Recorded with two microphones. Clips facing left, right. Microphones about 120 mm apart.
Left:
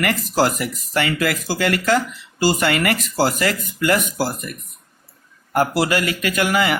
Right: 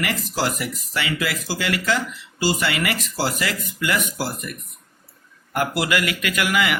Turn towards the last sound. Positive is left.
turn(degrees=35)  # may be behind; listen again after turning